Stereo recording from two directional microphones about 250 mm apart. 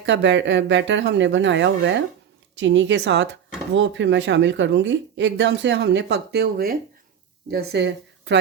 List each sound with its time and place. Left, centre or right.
0.0 s a woman's voice: right